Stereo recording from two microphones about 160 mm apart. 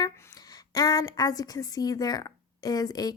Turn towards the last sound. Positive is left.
turn(degrees=25)  # may be behind; listen again after turning